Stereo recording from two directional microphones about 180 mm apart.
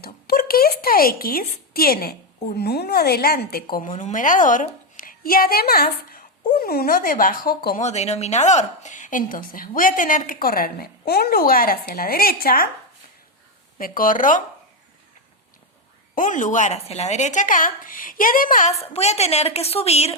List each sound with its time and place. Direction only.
0.0 s a sound: 60° left (ahead or behind)
2.6 s a woman's voice: 60° left (ahead or behind)
7.8 s a woman's voice: 40° left (ahead or behind); by 12.6 s 55° left (ahead or behind)
13.7 s a woman's voice: 50° left (ahead or behind)
16.1 s a woman's voice: 45° left (ahead or behind)
18.8 s speech: 35° left (ahead or behind)